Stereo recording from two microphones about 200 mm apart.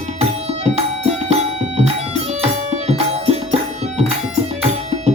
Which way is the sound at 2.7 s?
30° right (ahead or behind).